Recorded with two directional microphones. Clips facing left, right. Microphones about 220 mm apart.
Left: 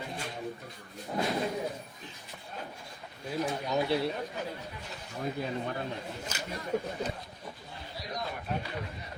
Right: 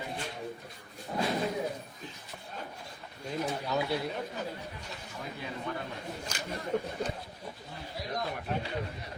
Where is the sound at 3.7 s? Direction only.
20° left (ahead or behind).